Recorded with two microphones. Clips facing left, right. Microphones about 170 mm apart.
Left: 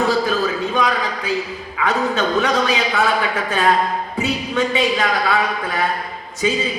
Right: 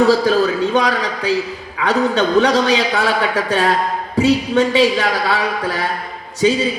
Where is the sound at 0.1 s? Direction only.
80° right.